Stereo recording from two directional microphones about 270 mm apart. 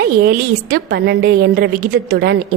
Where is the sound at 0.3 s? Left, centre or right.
Right.